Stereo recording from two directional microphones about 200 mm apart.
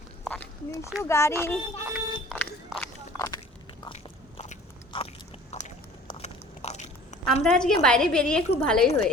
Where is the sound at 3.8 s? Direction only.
30° left (ahead or behind).